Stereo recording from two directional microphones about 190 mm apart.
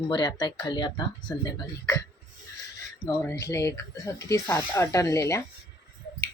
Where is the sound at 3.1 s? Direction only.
15° left (ahead or behind).